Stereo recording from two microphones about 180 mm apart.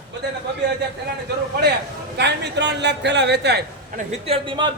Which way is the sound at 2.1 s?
70° right (ahead or behind).